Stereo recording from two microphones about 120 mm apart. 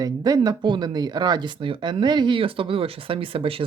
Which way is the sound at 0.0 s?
35° right (ahead or behind).